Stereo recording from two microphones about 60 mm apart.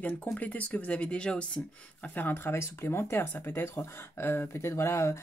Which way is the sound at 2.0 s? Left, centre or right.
Left.